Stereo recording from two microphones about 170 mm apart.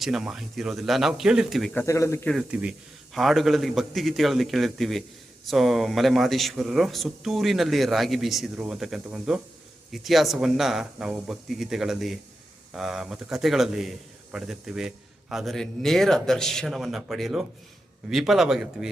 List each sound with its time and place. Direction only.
0.0 s speech: centre (ahead or behind)
1.7 s speech: 15° left (ahead or behind)
2.3 s speech: 5° right (ahead or behind)